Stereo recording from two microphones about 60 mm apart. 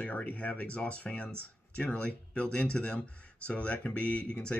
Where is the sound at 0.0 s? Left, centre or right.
Left.